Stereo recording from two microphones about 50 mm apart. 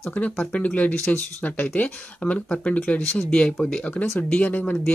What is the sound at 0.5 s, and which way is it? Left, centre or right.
Speech, left.